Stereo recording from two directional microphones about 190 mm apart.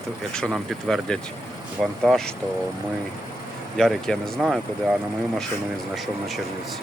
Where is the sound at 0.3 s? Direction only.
5° left (ahead or behind).